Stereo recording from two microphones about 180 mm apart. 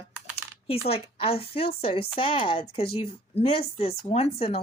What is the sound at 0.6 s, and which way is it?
A woman's voice, 35° left (ahead or behind).